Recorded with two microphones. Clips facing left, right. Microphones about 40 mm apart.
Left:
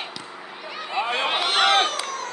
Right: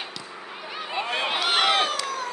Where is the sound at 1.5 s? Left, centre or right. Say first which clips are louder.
Left 2 dB; centre.